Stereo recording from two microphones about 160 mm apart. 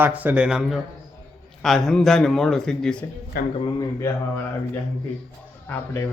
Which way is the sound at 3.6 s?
20° left (ahead or behind).